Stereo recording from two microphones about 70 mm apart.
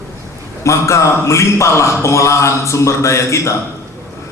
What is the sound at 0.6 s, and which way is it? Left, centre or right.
A man's voice, left.